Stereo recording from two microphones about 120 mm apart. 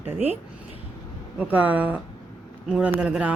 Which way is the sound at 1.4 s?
15° right (ahead or behind).